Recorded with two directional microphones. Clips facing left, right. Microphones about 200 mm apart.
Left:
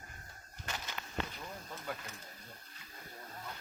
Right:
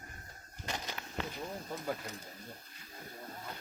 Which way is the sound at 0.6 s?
30° right (ahead or behind).